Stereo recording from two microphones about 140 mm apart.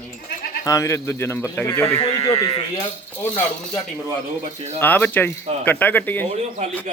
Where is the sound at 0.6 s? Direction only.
20° left (ahead or behind).